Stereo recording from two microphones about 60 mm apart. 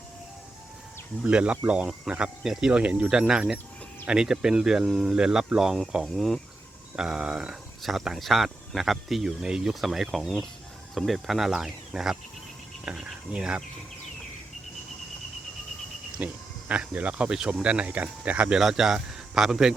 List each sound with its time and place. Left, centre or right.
1.2 s speech: centre
6.1 s speech: centre
6.9 s speech: centre
10.2 s speech: centre
13.3 s speech: centre
16.2 s speech: right
18.6 s speech: centre